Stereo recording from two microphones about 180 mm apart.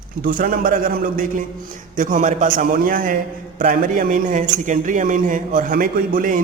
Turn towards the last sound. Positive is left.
turn(degrees=-50)  # may be behind; listen again after turning